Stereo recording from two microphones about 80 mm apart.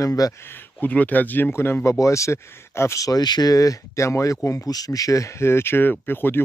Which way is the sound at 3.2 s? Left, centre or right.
Left.